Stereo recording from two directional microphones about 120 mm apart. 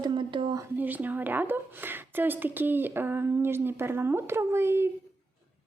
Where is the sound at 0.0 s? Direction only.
45° right (ahead or behind).